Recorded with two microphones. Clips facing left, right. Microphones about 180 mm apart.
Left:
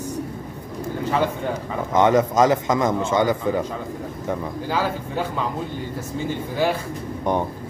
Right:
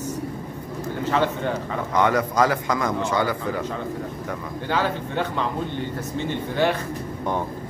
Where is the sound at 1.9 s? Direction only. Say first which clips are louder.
Left 4 dB; 20° left (ahead or behind).